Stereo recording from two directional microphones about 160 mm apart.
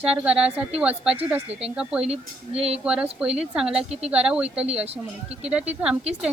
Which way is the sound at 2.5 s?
40° right (ahead or behind).